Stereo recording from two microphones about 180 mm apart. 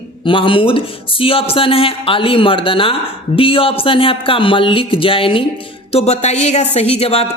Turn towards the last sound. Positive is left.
turn(degrees=35)  # may be behind; listen again after turning